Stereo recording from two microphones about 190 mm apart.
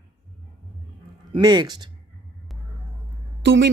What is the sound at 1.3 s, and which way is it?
Speech, 20° right (ahead or behind).